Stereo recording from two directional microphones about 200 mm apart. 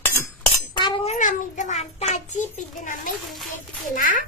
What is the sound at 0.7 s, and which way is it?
Child singing, 25° left (ahead or behind).